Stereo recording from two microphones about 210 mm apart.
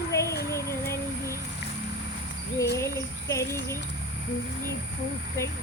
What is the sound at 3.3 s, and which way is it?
Speech, 15° left (ahead or behind).